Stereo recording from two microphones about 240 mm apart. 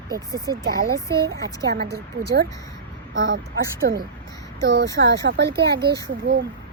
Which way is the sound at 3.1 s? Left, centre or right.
Right.